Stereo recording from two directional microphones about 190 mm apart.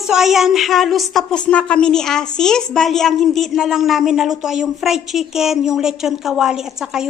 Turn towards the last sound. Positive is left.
turn(degrees=-5)  # may be behind; listen again after turning